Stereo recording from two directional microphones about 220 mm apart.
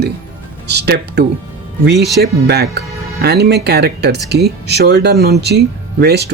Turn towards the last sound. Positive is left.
turn(degrees=-50)  # may be behind; listen again after turning